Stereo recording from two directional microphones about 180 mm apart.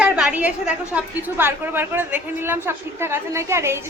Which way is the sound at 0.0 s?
5° right (ahead or behind).